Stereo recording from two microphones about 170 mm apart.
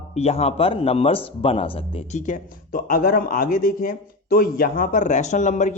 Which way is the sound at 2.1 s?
50° left (ahead or behind).